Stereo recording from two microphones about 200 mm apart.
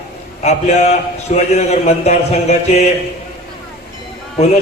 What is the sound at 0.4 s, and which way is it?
Speech, 35° left (ahead or behind).